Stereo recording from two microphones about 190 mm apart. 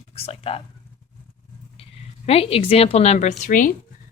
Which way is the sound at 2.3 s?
30° left (ahead or behind).